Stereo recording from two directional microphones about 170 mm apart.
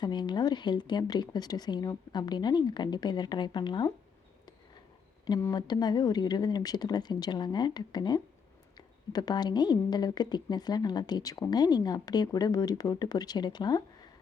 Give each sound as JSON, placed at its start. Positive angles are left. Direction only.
{"t": 0.0, "sound": "a woman's voice", "side_deg": 25}
{"t": 5.2, "sound": "a woman's voice", "side_deg": 20}